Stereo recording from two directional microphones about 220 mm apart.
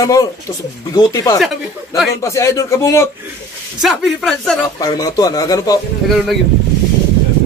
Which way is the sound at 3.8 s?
Centre (ahead or behind).